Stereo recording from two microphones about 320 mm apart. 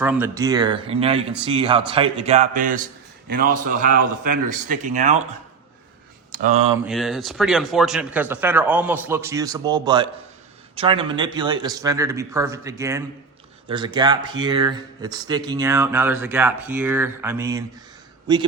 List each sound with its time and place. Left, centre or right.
0.0 s speech: centre; by 5.1 s right
6.3 s speech: right
6.8 s speech: centre